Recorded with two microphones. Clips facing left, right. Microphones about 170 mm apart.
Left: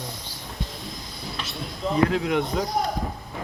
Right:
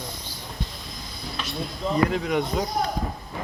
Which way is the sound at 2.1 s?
Centre (ahead or behind).